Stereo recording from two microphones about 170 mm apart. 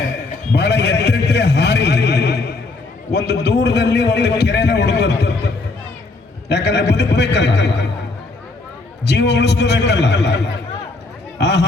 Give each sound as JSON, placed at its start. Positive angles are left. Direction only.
{"t": 0.5, "sound": "a man's voice", "side_deg": 80}
{"t": 6.5, "sound": "a man's voice", "side_deg": 80}
{"t": 9.0, "sound": "a man's voice", "side_deg": 90}
{"t": 11.3, "sound": "chatter", "side_deg": 90}